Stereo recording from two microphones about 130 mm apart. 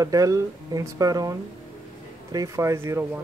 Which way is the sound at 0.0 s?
25° right (ahead or behind).